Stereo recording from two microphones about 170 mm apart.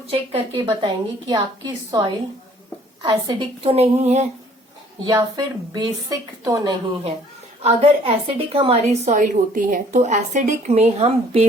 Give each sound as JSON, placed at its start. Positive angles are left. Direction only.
{"t": 0.1, "sound": "a woman's voice", "side_deg": -35}
{"t": 5.0, "sound": "a woman's voice", "side_deg": -25}
{"t": 7.6, "sound": "a woman's voice", "side_deg": -40}